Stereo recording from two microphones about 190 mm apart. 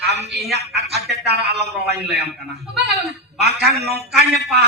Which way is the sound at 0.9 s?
60° right (ahead or behind).